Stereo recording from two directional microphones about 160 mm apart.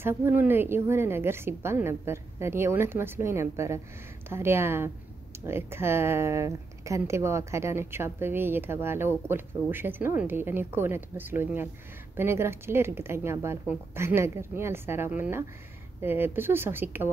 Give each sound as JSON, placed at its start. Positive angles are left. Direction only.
{"t": 0.0, "sound": "a woman's voice", "side_deg": -15}